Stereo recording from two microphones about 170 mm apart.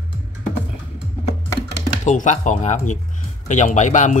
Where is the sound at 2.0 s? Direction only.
45° left (ahead or behind).